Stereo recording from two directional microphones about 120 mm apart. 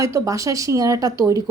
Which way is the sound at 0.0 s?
25° right (ahead or behind).